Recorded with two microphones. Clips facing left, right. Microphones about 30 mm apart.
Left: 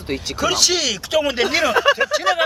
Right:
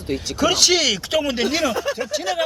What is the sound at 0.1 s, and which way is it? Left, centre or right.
Speech, left.